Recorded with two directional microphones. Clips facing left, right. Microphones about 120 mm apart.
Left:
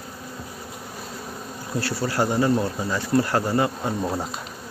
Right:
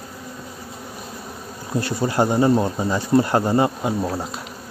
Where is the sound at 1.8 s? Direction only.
20° right (ahead or behind).